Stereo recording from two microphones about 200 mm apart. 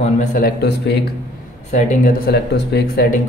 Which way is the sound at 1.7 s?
50° left (ahead or behind).